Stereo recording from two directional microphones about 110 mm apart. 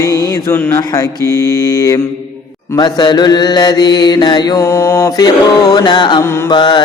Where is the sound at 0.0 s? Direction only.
25° left (ahead or behind).